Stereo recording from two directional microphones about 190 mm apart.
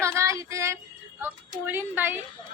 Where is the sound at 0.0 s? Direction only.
15° right (ahead or behind).